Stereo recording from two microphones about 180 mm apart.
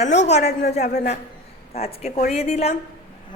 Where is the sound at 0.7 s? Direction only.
40° left (ahead or behind).